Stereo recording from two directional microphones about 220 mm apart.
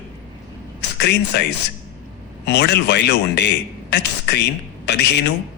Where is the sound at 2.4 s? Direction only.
50° left (ahead or behind).